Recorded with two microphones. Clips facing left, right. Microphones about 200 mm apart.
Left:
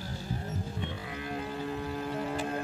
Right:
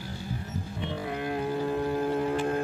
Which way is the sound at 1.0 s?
55° right (ahead or behind).